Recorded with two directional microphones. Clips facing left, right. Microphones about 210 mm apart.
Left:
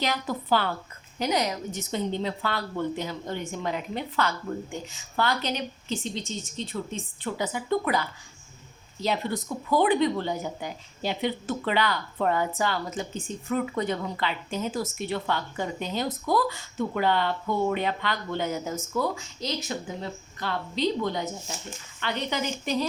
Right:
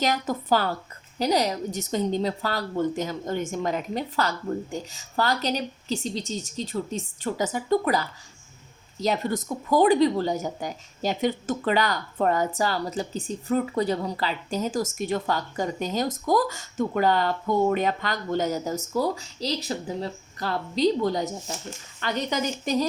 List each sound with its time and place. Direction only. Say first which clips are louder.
0.0 s a woman's voice: right 3 dB; 45° right (ahead or behind)